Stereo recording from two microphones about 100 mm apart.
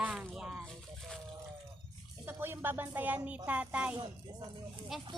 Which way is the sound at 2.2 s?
20° right (ahead or behind).